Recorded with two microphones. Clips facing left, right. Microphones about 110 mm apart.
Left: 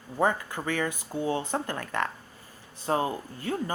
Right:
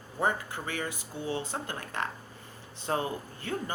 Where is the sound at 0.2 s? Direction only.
50° left (ahead or behind).